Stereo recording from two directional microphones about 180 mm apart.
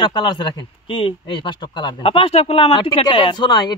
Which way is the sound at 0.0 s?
25° left (ahead or behind).